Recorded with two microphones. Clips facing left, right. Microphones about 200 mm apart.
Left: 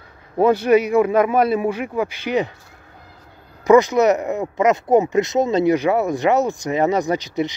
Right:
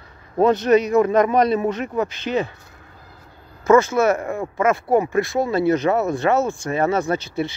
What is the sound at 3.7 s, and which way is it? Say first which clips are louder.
Speech: left 2 dB; 15° left (ahead or behind).